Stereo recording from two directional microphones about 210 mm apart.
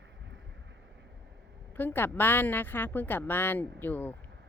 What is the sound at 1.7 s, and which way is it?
A woman's voice, 10° left (ahead or behind).